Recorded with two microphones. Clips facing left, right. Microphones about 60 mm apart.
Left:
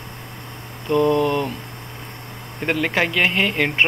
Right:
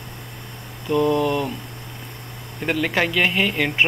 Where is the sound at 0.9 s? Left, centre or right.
Centre.